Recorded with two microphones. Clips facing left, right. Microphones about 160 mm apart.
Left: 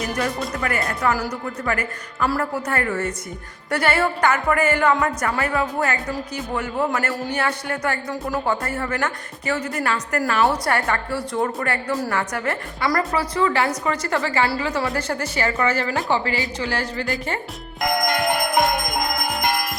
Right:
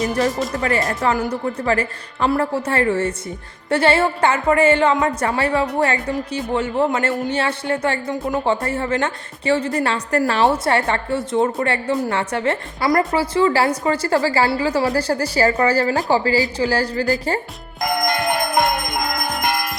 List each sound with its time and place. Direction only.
0.6 s a woman's voice: 25° right (ahead or behind)